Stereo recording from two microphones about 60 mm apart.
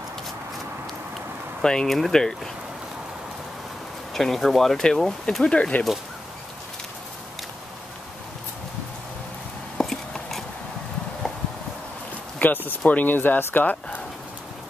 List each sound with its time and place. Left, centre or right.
1.6 s speech: centre
4.1 s speech: centre
9.8 s a sound: centre
12.4 s speech: left